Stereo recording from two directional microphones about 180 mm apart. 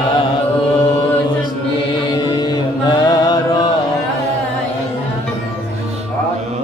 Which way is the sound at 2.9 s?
20° left (ahead or behind).